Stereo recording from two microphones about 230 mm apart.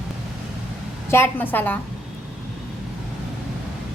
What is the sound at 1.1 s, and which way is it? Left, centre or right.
Speech, centre.